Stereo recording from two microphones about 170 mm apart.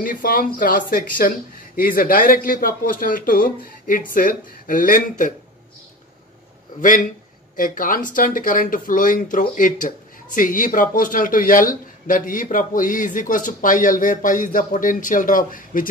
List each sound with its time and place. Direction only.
0.0 s a man's voice: 55° left (ahead or behind)
6.8 s speech: 50° left (ahead or behind)